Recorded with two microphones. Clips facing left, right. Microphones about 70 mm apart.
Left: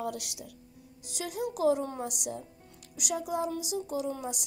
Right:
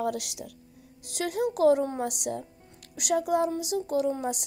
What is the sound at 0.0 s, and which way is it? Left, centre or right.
Speech, right.